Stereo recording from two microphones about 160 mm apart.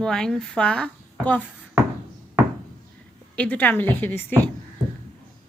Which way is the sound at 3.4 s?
10° left (ahead or behind).